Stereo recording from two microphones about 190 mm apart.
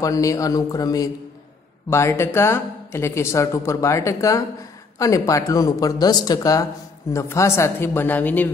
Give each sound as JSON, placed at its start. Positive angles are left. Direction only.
{"t": 0.0, "sound": "a man's voice", "side_deg": 15}